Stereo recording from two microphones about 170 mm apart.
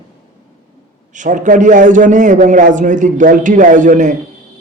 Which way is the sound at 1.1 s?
50° right (ahead or behind).